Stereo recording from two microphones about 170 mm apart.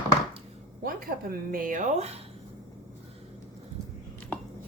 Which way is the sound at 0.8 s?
60° right (ahead or behind).